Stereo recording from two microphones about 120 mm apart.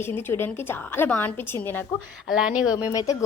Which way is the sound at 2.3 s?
5° right (ahead or behind).